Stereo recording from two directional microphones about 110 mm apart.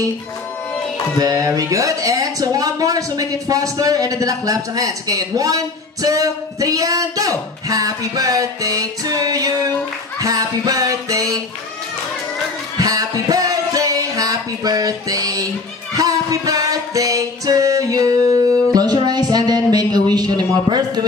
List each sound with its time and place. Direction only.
1.2 s speech: 30° right (ahead or behind)
12.7 s music: 35° right (ahead or behind)